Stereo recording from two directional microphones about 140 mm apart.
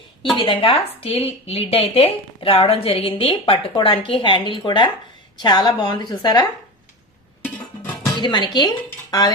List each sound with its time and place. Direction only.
0.3 s speech: 40° left (ahead or behind)
8.0 s music: 30° left (ahead or behind)
8.5 s speech: 30° left (ahead or behind)